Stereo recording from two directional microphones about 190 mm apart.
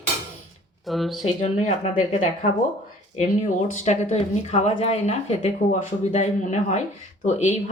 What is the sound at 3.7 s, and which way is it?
Speech, 35° left (ahead or behind).